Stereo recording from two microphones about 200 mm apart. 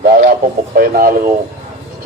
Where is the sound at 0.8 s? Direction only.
45° right (ahead or behind).